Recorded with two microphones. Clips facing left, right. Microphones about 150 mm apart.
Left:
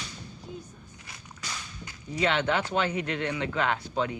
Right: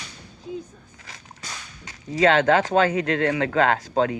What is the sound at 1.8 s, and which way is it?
Speech, 90° right.